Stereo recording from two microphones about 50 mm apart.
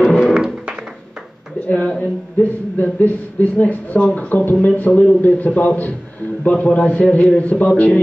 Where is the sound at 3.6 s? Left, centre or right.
Left.